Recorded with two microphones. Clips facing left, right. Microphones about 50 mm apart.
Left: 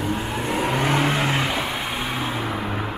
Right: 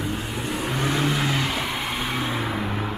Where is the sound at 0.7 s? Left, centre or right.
Left.